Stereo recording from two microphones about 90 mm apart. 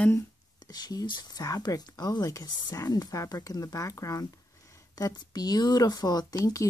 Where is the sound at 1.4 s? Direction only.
40° left (ahead or behind).